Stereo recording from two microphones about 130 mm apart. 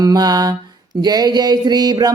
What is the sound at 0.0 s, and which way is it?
Speech, 30° right (ahead or behind).